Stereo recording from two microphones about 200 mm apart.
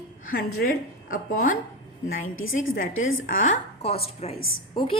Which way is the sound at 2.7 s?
40° left (ahead or behind).